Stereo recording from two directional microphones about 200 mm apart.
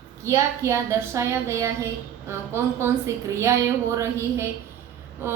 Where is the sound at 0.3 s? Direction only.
15° right (ahead or behind).